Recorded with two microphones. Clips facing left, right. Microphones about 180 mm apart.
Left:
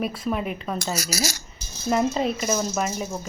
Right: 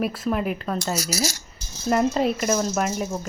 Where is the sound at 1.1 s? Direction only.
85° left.